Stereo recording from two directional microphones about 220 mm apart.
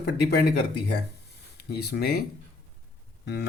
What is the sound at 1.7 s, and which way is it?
Speech, 45° left (ahead or behind).